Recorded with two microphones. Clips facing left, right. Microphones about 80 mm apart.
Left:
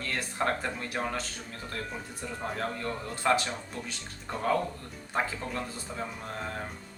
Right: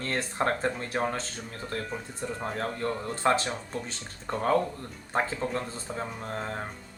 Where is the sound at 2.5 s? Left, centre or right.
Right.